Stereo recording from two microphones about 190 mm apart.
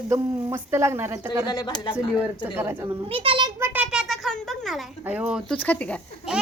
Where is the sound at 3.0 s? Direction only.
30° right (ahead or behind).